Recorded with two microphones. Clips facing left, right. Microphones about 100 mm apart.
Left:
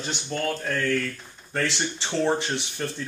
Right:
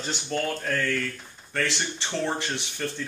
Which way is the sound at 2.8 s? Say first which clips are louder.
Right 1 dB; 10° left (ahead or behind).